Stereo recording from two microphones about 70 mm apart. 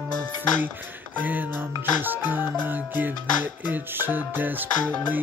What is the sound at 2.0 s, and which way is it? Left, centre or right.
Speech, right.